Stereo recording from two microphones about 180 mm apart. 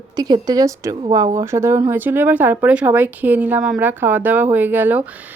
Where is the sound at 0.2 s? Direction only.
20° right (ahead or behind).